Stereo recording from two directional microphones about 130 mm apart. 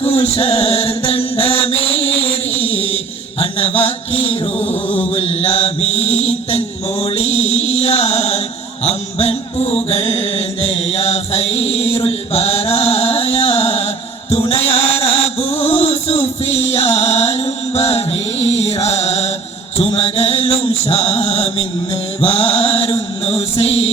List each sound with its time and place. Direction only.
0.0 s music: 50° left (ahead or behind)
2.8 s chant: 50° left (ahead or behind)
7.0 s music: 50° left (ahead or behind)
19.7 s mantra: 50° left (ahead or behind)
22.2 s music: 50° left (ahead or behind)
23.2 s mantra: 50° left (ahead or behind)